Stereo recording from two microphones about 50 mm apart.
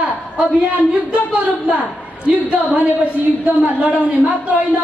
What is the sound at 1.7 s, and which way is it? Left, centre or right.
A woman's voice, right.